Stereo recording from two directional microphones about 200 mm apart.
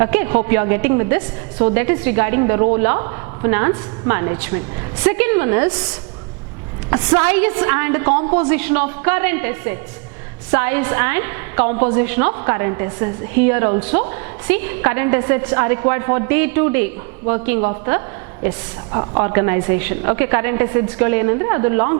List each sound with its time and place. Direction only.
0.0 s a woman's voice: 15° right (ahead or behind)
6.9 s a woman's voice: 15° right (ahead or behind)